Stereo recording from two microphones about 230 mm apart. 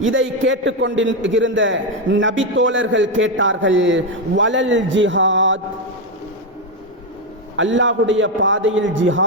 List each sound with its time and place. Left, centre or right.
0.0 s a man's voice: right
7.5 s a man's voice: right